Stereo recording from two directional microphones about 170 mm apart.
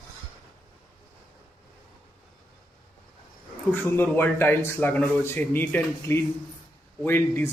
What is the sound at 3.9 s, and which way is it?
Speech, 10° left (ahead or behind).